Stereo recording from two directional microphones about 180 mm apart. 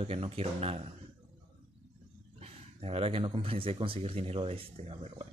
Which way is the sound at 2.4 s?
35° right (ahead or behind).